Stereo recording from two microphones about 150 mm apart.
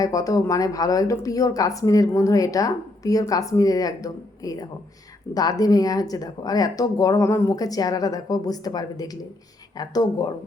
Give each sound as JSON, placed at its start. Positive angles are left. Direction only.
{"t": 0.0, "sound": "a woman's voice", "side_deg": 25}